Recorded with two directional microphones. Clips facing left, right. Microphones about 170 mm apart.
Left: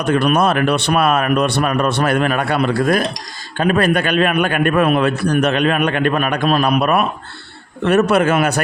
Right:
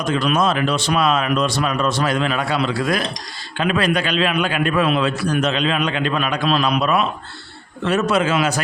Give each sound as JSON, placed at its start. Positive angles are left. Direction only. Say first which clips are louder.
{"t": 0.0, "sound": "a man's voice", "louder": "left 4 dB", "side_deg": 60}